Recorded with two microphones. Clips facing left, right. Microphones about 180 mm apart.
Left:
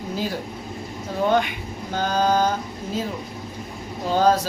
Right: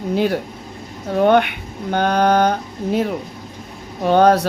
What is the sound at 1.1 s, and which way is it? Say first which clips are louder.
Speech: right 7 dB; 65° right (ahead or behind).